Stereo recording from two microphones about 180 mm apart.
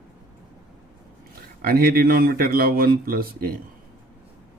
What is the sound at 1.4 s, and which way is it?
Speech, 55° right (ahead or behind).